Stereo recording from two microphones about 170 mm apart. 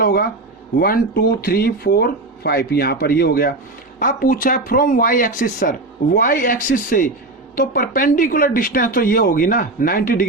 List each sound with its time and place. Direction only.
0.0 s a woman's voice: 60° left (ahead or behind)